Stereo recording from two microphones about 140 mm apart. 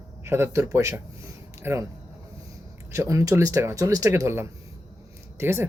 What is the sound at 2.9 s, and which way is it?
Speech, 20° right (ahead or behind).